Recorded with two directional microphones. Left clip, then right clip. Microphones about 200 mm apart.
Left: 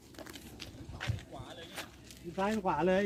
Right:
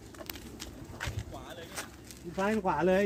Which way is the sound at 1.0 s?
Centre (ahead or behind).